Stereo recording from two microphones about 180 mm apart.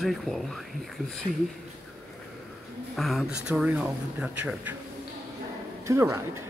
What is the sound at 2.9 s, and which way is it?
Speech, centre (ahead or behind).